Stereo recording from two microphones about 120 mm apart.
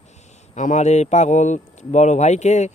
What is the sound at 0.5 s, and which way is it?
Speech, 90° left.